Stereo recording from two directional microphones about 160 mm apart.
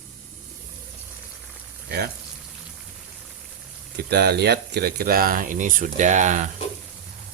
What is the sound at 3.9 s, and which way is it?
Speech, 90° right.